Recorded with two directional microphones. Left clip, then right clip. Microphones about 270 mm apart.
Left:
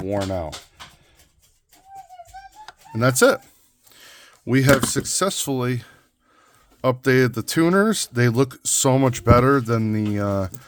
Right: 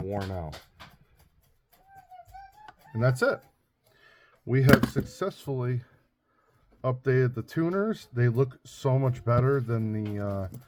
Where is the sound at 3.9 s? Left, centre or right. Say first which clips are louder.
Left 11 dB; left.